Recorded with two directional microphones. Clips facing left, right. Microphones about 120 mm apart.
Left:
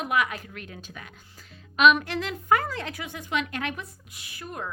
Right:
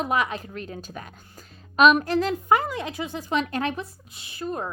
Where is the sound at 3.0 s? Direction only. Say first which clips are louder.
Right 5 dB; 30° right (ahead or behind).